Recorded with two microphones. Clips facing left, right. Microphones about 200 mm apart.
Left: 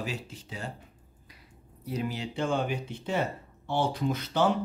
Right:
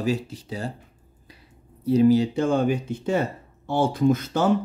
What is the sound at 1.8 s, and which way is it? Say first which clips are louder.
Speech: right 16 dB; 30° right (ahead or behind).